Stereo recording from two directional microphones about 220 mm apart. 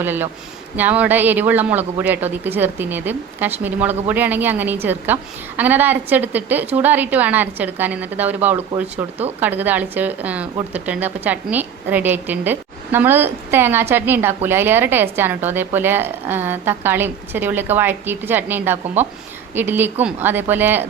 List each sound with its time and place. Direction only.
0.0 s a woman's voice: 10° right (ahead or behind)